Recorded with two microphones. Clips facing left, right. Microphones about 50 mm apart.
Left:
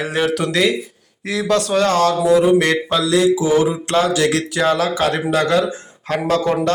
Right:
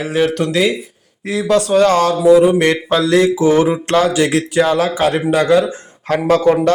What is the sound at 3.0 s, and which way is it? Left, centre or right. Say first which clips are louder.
Mantra: right 4 dB; right.